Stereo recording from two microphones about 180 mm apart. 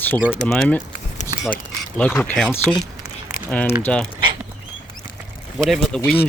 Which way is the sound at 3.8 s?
5° left (ahead or behind).